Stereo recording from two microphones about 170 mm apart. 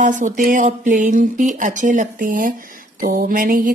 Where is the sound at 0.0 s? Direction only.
50° right (ahead or behind).